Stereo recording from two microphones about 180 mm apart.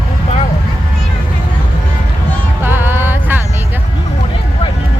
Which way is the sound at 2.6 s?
10° right (ahead or behind).